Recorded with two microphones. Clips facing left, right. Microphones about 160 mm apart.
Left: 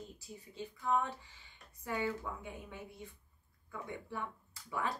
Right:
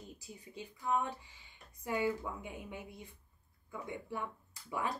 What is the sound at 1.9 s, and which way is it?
Speech, 10° right (ahead or behind).